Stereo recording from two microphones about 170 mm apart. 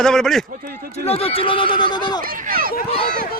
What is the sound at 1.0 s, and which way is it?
A man's voice, 35° left (ahead or behind).